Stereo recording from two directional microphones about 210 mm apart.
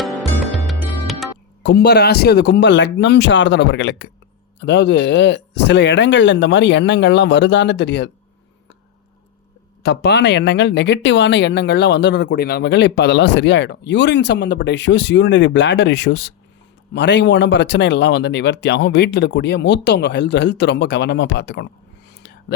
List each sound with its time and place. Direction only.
0.0 s music: centre (ahead or behind)
1.6 s speech: 50° left (ahead or behind)
9.8 s speech: 50° left (ahead or behind)
22.1 s whispering: 50° left (ahead or behind)